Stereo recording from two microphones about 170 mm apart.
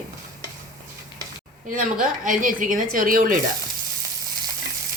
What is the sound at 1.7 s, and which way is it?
Speech, 50° right (ahead or behind).